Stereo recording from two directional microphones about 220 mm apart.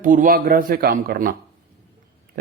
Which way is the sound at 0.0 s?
35° right (ahead or behind).